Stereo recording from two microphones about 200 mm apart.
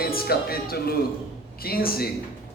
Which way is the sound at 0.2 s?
50° left (ahead or behind).